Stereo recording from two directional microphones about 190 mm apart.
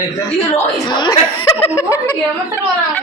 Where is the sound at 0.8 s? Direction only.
25° left (ahead or behind).